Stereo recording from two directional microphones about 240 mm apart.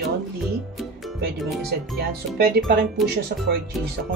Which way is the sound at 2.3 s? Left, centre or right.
Right.